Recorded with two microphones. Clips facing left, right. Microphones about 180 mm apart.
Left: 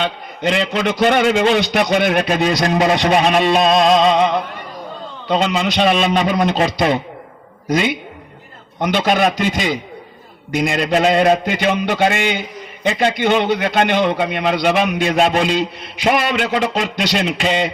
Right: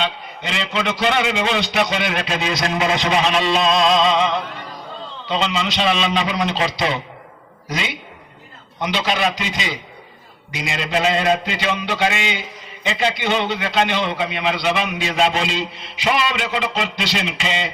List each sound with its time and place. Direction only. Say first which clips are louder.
0.0 s a man's voice: left 5 dB; 50° left (ahead or behind)
2.8 s a man's voice: left 4 dB; 55° left (ahead or behind)